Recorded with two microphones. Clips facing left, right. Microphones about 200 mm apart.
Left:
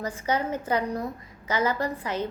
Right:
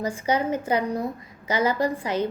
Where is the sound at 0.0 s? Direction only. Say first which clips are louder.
Right 3 dB; 10° right (ahead or behind).